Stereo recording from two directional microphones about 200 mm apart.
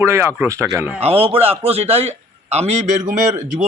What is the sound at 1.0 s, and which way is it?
A man's voice, 30° right (ahead or behind).